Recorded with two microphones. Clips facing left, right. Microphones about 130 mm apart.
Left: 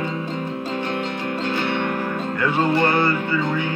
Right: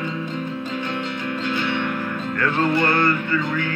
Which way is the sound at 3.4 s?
25° left (ahead or behind).